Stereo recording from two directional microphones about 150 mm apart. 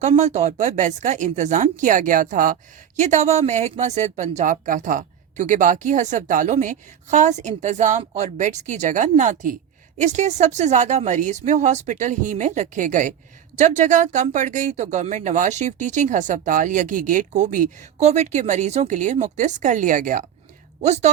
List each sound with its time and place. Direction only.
0.2 s speech: 50° right (ahead or behind)
20.8 s speech: 50° right (ahead or behind)